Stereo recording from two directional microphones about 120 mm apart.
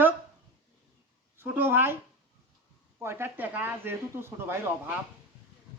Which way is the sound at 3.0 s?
20° right (ahead or behind).